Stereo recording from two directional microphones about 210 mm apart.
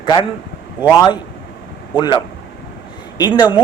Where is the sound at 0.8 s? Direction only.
20° left (ahead or behind).